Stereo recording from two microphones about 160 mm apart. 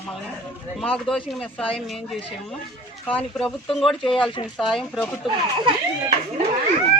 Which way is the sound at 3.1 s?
10° left (ahead or behind).